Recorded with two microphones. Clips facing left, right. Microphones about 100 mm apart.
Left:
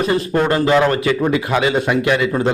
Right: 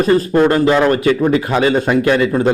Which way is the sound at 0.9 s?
35° right (ahead or behind).